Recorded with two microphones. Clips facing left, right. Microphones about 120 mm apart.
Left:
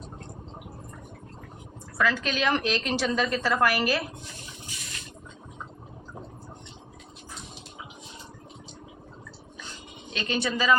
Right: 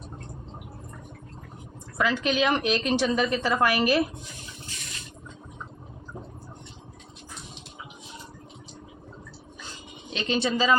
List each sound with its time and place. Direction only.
2.0 s a woman's voice: 20° right (ahead or behind)
10.1 s speech: 25° right (ahead or behind)